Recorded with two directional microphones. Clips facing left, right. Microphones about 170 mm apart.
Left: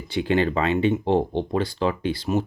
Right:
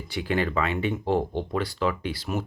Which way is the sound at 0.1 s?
25° left (ahead or behind).